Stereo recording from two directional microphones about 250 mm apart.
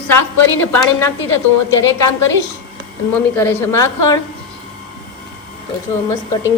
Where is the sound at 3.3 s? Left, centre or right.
Centre.